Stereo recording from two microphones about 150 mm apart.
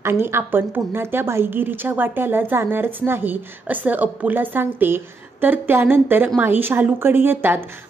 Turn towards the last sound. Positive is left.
turn(degrees=-15)  # may be behind; listen again after turning